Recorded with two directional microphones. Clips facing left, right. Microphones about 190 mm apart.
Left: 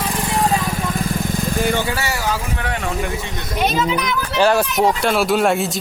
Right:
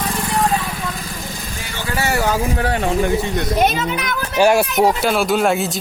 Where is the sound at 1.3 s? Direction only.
50° left (ahead or behind).